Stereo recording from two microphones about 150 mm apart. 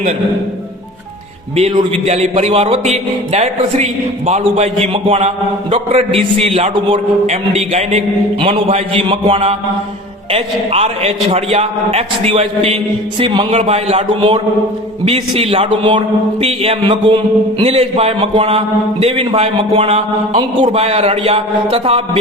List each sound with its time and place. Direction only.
1.7 s a man's voice: 45° right (ahead or behind)
13.5 s a man's voice: 45° right (ahead or behind)